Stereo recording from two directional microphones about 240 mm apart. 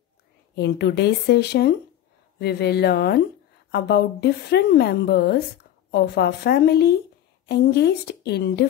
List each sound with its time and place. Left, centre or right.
0.6 s a woman's voice: left